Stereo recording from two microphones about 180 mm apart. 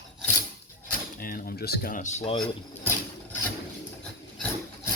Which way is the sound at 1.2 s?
55° left (ahead or behind).